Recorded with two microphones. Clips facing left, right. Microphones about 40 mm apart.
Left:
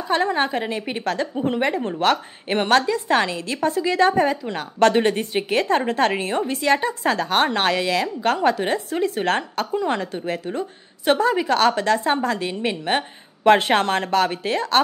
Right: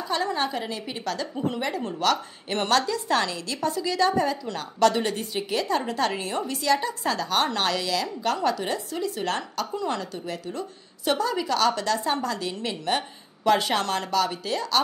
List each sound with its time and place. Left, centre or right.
0.1 s a woman's voice: left